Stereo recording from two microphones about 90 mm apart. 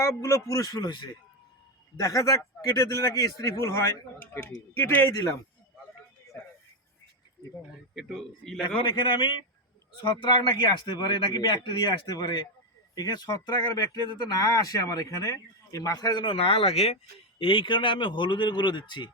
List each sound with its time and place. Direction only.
0.0 s speech: 35° left (ahead or behind); by 1.0 s 50° left (ahead or behind)
2.0 s speech: 40° left (ahead or behind)
5.1 s speech: 40° left (ahead or behind)
7.9 s a man's voice: centre (ahead or behind)
8.6 s a man's voice: 60° left (ahead or behind); by 16.2 s 45° left (ahead or behind)
16.2 s a man's voice: 90° left; by 19.1 s 60° left (ahead or behind)